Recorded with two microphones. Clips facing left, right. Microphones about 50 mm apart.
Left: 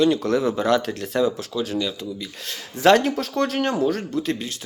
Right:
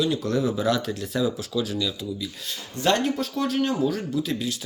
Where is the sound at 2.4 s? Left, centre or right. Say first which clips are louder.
Left 9 dB; left.